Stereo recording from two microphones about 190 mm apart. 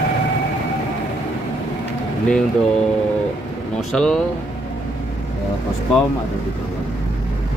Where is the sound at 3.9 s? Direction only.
5° left (ahead or behind).